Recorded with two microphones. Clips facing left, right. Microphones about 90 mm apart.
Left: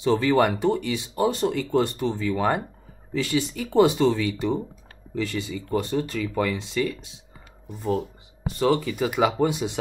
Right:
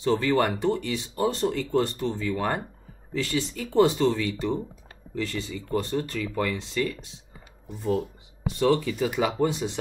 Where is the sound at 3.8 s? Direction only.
10° left (ahead or behind).